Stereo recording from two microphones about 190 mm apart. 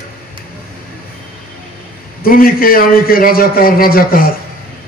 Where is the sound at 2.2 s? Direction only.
50° left (ahead or behind).